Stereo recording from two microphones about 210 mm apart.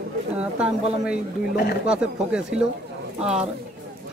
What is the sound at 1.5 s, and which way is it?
Speech, 50° left (ahead or behind).